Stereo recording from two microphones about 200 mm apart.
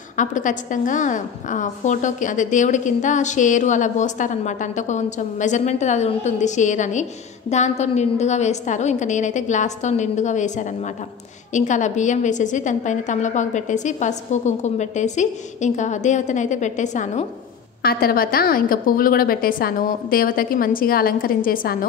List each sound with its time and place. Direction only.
0.2 s a woman's voice: 40° left (ahead or behind)
17.8 s a woman's voice: 50° left (ahead or behind)